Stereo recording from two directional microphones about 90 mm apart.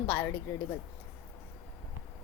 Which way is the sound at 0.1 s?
20° left (ahead or behind).